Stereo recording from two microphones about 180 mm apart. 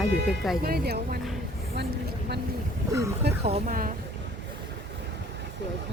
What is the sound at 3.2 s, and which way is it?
Speech, 65° right (ahead or behind).